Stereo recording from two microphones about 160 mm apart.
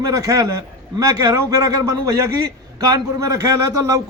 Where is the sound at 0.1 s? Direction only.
20° right (ahead or behind).